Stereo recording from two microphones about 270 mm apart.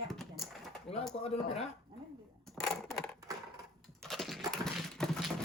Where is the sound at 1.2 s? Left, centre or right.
Left.